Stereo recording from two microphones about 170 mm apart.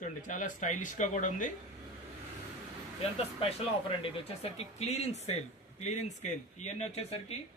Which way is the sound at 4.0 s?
30° left (ahead or behind).